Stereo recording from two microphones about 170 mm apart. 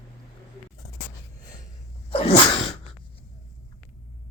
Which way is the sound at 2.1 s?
35° left (ahead or behind).